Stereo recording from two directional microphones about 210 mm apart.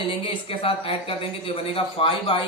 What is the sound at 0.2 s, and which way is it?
Speech, 25° left (ahead or behind).